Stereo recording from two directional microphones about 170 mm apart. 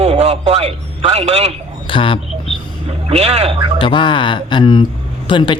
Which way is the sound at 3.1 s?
40° right (ahead or behind).